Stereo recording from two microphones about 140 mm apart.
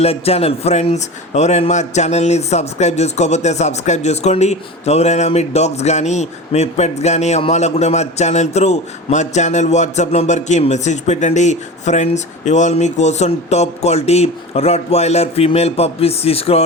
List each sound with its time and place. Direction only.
0.0 s speech: 45° left (ahead or behind)